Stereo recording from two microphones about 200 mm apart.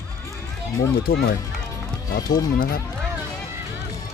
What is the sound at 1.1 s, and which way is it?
Speech, 50° left (ahead or behind).